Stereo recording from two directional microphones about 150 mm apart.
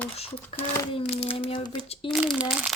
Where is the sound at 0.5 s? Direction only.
35° left (ahead or behind).